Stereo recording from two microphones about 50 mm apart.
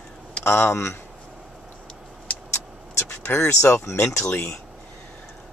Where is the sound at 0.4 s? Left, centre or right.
Left.